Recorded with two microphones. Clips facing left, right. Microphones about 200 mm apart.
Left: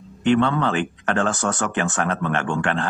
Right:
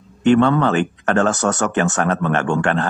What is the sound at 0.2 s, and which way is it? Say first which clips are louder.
Speech: right 5 dB; 45° right (ahead or behind).